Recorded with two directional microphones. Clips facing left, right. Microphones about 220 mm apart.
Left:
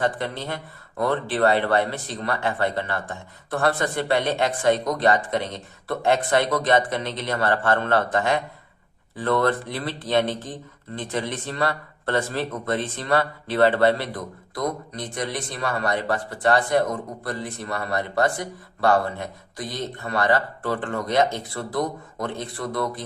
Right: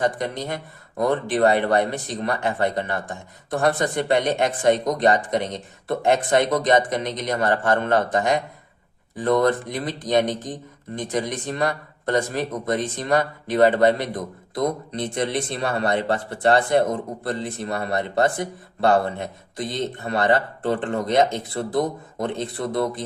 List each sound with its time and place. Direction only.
0.0 s speech: 15° right (ahead or behind)